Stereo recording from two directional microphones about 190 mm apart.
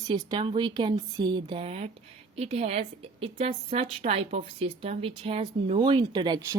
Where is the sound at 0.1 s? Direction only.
25° right (ahead or behind).